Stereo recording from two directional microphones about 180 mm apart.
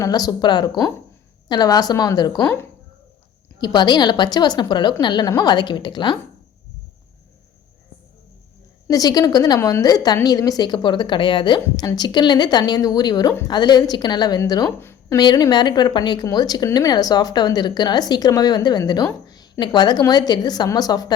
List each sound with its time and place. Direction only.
0.0 s speech: 20° left (ahead or behind)
3.6 s speech: 25° left (ahead or behind)
8.9 s speech: 20° left (ahead or behind)